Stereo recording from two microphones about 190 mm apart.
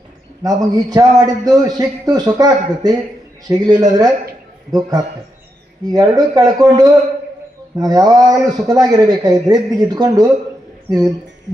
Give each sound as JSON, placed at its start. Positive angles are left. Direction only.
{"t": 0.4, "sound": "a man's voice", "side_deg": -20}